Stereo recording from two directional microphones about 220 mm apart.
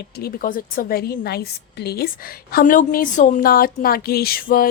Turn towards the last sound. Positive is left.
turn(degrees=40)  # may be behind; listen again after turning